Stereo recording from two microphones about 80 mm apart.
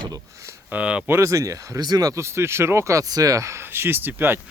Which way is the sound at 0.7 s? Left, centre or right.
Centre.